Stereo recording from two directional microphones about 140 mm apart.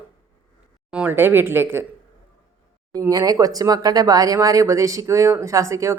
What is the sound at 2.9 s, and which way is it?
Speech, 25° right (ahead or behind).